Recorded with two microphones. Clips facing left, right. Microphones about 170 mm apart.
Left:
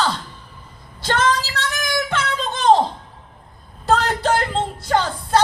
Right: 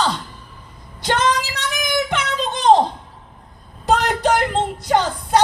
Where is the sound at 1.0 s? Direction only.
15° right (ahead or behind).